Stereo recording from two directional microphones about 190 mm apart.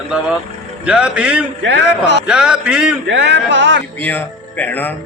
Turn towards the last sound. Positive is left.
turn(degrees=10)  # may be behind; listen again after turning